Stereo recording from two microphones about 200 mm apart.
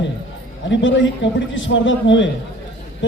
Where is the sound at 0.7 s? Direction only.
65° left (ahead or behind).